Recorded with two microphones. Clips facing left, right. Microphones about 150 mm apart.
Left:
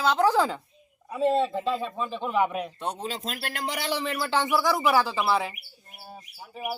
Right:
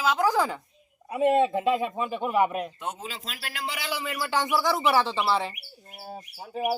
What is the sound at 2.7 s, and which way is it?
Speech, 35° left (ahead or behind).